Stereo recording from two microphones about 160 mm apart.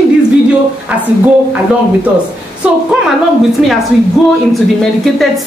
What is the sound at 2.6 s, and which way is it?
Speech, 5° right (ahead or behind).